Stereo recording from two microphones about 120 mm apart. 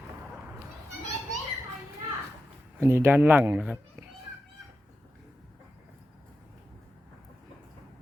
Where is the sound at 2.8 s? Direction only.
20° right (ahead or behind).